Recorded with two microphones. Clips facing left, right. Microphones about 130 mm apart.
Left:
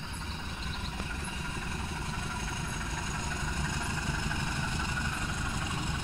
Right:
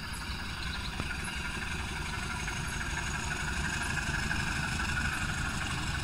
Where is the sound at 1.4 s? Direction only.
30° left (ahead or behind).